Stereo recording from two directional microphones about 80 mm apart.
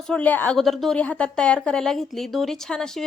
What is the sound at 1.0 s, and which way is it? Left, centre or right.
Speech, centre.